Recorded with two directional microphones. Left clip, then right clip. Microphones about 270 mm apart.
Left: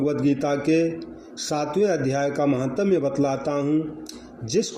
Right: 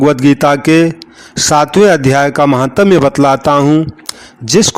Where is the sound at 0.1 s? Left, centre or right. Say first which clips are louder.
Right 14 dB; right.